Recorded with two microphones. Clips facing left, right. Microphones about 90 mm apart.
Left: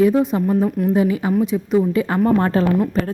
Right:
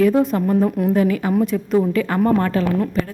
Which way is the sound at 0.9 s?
20° left (ahead or behind).